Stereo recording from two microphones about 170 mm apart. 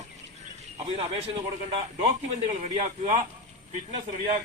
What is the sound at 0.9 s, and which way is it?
Speech, 35° right (ahead or behind).